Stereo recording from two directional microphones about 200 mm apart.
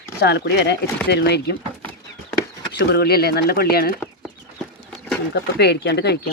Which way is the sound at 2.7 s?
55° left (ahead or behind).